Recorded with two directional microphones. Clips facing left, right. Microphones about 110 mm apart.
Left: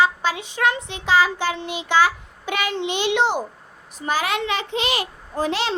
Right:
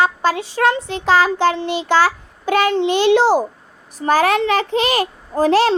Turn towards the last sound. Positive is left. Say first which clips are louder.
# right 9 dB
turn(degrees=-40)  # may be behind; listen again after turning